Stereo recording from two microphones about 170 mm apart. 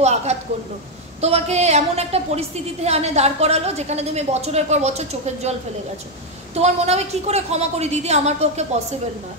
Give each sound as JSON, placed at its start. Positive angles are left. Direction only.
{"t": 0.0, "sound": "a woman's voice", "side_deg": -40}
{"t": 6.5, "sound": "a woman's voice", "side_deg": -40}